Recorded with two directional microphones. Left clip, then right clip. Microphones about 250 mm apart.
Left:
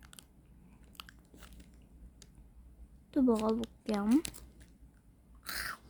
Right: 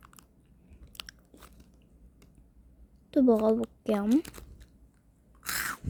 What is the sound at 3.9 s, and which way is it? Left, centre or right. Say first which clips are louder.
Speech: right 4 dB; centre.